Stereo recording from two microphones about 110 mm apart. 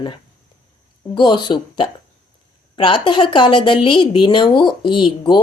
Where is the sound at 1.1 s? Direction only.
45° left (ahead or behind).